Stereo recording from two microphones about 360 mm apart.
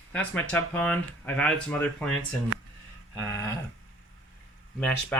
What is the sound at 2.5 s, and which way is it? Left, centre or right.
Speech, right.